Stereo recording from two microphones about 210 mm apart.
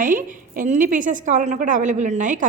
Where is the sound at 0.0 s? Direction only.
40° right (ahead or behind).